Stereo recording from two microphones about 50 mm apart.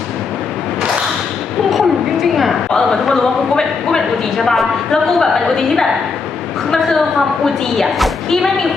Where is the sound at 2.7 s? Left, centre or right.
Centre.